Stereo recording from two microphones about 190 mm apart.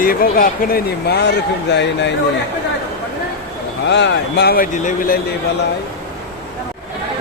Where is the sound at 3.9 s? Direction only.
65° left (ahead or behind).